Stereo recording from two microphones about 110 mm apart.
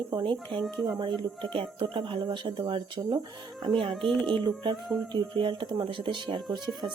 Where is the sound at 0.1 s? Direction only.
45° right (ahead or behind).